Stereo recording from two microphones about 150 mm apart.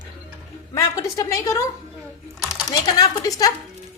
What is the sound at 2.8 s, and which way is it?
Speech, 25° left (ahead or behind).